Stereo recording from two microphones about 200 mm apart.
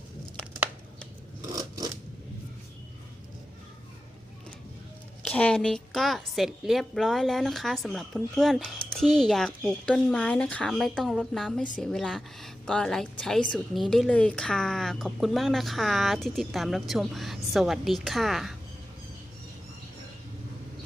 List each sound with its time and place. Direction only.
1.4 s scissors: 20° right (ahead or behind)
5.3 s a woman's voice: 5° left (ahead or behind)